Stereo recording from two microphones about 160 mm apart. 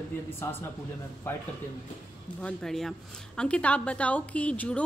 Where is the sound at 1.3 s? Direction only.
15° left (ahead or behind).